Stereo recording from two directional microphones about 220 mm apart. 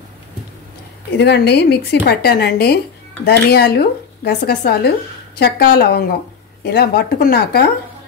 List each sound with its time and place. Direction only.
1.1 s speech: 50° left (ahead or behind)